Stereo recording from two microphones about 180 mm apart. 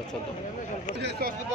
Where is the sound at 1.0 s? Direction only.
60° right (ahead or behind).